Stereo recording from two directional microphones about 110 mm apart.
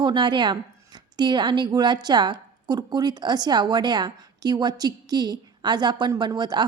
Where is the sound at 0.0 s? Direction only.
45° right (ahead or behind).